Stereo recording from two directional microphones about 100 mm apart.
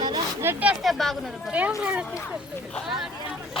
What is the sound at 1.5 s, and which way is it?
Speech, 10° right (ahead or behind).